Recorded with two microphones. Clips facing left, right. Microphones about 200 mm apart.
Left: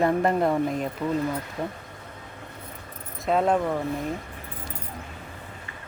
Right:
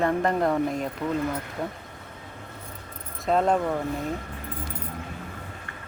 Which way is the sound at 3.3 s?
Centre (ahead or behind).